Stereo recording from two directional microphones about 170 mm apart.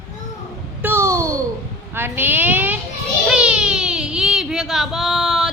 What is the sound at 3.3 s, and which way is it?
Child singing, 5° right (ahead or behind).